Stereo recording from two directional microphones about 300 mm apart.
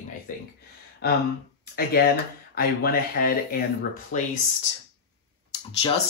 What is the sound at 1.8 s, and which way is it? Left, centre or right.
Speech, left.